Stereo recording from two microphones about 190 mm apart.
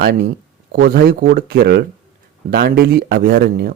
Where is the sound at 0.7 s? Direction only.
55° right (ahead or behind).